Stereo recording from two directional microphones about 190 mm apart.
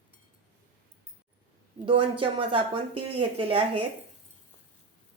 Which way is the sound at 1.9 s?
25° right (ahead or behind).